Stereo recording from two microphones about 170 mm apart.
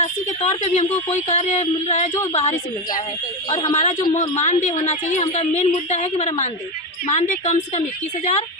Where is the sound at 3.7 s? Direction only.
40° left (ahead or behind).